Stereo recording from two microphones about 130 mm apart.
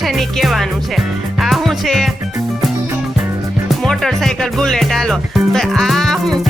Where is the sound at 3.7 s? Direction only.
Centre (ahead or behind).